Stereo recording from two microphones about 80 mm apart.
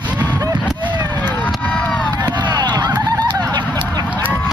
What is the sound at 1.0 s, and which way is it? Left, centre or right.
Emergency vehicle, left.